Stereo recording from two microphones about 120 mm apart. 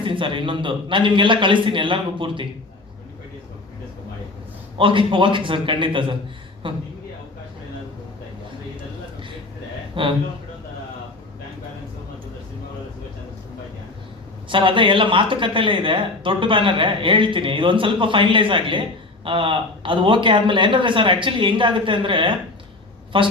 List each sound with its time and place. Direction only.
0.0 s speech: 45° right (ahead or behind)
4.8 s speech: 45° right (ahead or behind)
9.9 s speech: 45° right (ahead or behind)
14.5 s speech: 45° right (ahead or behind)